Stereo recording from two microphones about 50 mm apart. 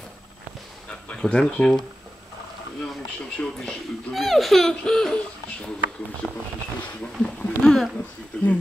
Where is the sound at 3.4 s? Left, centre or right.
Centre.